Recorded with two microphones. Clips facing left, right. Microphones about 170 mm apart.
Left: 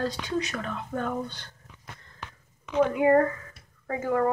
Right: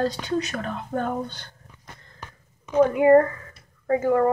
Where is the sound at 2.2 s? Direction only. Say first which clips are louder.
Even; 45° right (ahead or behind).